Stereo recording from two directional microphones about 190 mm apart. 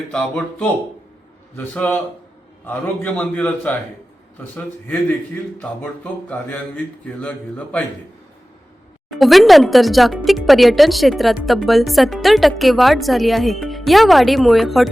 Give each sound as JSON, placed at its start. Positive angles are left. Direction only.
{"t": 0.1, "sound": "speech", "side_deg": 5}
{"t": 9.0, "sound": "speech", "side_deg": 0}